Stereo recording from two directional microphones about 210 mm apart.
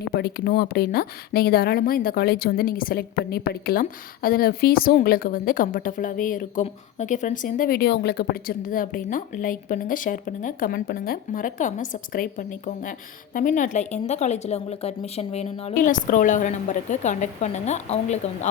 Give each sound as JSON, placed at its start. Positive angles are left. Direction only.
{"t": 0.1, "sound": "speech", "side_deg": 50}